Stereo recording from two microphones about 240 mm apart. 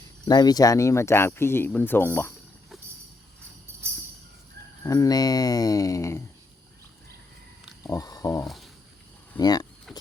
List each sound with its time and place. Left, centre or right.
0.3 s speech: centre
4.8 s speech: centre
7.9 s speech: centre
8.4 s speech: centre
9.4 s speech: centre
9.9 s clip-clop: centre